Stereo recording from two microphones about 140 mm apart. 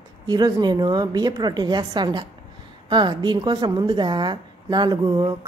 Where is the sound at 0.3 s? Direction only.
30° right (ahead or behind).